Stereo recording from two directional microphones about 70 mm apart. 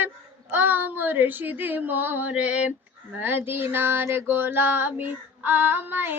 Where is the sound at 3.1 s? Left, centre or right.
Right.